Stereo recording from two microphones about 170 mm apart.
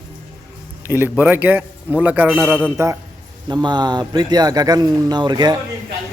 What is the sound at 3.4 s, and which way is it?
Speech, 25° right (ahead or behind).